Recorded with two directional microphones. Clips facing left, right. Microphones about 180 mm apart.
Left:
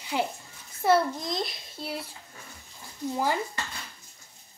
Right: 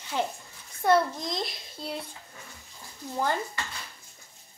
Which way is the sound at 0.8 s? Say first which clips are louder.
Even; centre (ahead or behind).